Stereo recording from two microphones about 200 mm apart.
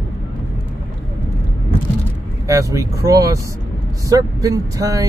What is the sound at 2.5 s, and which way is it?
Speech, 15° right (ahead or behind).